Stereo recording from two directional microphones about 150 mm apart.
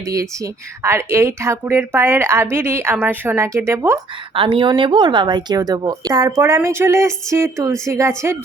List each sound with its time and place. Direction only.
0.1 s speech: 20° right (ahead or behind)
4.4 s speech: 35° right (ahead or behind); by 8.4 s 20° right (ahead or behind)